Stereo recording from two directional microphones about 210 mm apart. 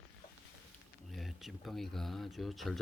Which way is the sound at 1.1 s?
Centre (ahead or behind).